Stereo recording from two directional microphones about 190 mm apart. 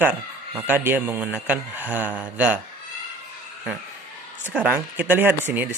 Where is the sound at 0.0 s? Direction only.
10° right (ahead or behind).